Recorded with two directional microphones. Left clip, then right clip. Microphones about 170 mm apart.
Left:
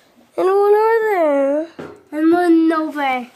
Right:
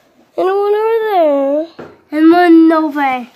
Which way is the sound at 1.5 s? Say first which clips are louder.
Right 4 dB; centre (ahead or behind).